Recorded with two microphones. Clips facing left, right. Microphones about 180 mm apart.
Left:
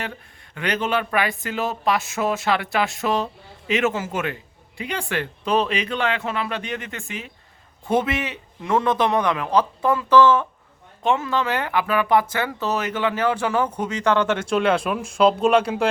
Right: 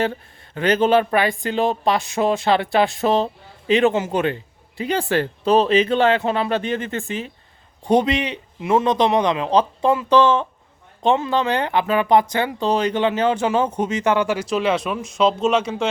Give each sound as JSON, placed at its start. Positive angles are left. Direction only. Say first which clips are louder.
{"t": 0.0, "sound": "speech", "louder": "right 10 dB", "side_deg": -35}
{"t": 7.9, "sound": "speech", "louder": "right 4 dB", "side_deg": -20}
{"t": 8.6, "sound": "speech", "louder": "right 3 dB", "side_deg": -15}
{"t": 14.5, "sound": "speech", "louder": "left 2 dB", "side_deg": 0}